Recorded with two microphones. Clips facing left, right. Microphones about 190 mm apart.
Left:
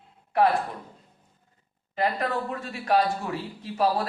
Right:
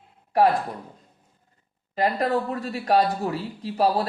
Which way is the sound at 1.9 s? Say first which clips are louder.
Right 4 dB; 35° right (ahead or behind).